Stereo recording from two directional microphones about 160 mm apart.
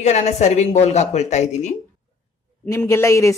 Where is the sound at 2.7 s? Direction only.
15° left (ahead or behind).